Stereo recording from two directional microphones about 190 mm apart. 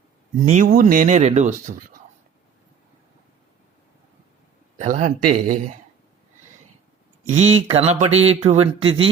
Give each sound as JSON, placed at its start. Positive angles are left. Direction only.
{"t": 0.4, "sound": "speech", "side_deg": -45}
{"t": 4.8, "sound": "speech", "side_deg": -40}
{"t": 7.3, "sound": "speech", "side_deg": -35}